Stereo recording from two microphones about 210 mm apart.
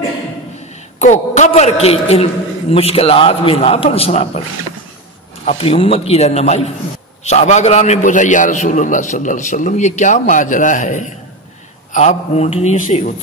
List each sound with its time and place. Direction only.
0.9 s a man's voice: 35° left (ahead or behind)
5.4 s a man's voice: 30° left (ahead or behind)